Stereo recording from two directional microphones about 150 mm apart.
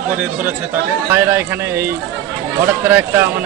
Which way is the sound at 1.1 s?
15° right (ahead or behind).